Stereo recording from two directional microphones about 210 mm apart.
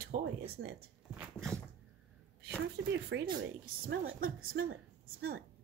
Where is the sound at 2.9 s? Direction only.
50° right (ahead or behind).